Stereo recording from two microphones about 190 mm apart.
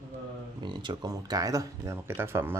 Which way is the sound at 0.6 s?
20° right (ahead or behind).